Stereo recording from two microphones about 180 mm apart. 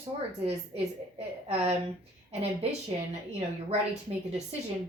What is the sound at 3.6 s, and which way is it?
Speech, 40° right (ahead or behind).